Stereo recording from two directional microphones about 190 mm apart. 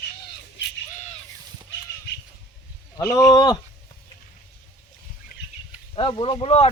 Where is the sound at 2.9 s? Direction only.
15° left (ahead or behind).